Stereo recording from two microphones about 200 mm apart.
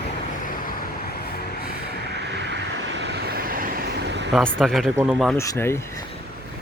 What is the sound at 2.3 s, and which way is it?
Vehicle, 60° right (ahead or behind).